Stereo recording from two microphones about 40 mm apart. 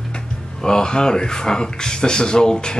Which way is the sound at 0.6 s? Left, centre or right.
Centre.